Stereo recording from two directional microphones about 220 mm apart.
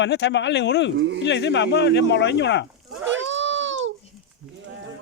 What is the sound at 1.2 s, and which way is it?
Speech, 55° left (ahead or behind).